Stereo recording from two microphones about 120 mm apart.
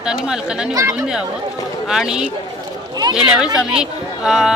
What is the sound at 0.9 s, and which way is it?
Speech, 5° right (ahead or behind).